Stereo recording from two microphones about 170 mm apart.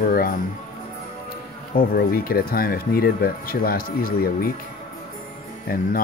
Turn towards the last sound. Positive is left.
turn(degrees=60)  # may be behind; listen again after turning